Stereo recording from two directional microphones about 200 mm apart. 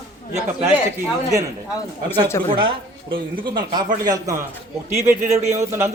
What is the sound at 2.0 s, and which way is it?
Speech, 10° left (ahead or behind).